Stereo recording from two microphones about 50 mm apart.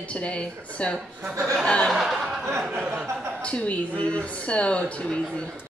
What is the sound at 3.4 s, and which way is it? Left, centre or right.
Speech, left.